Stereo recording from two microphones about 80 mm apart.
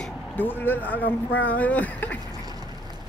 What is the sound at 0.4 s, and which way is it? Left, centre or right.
Speech, left.